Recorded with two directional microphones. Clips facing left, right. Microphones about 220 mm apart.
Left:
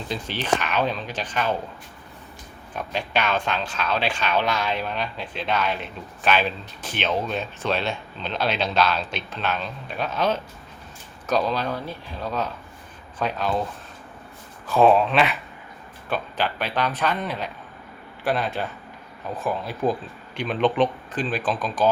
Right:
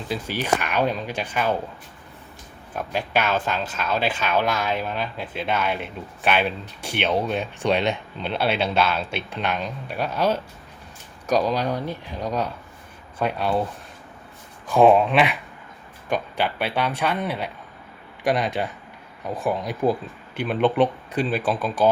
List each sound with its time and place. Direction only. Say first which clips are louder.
0.3 s speech: even; 10° right (ahead or behind)
2.7 s speech: right 2 dB; 5° right (ahead or behind)
14.7 s speech: right 2 dB; 15° right (ahead or behind)